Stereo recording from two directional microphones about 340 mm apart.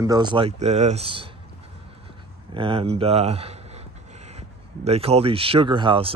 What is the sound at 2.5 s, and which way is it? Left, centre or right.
Speech, centre.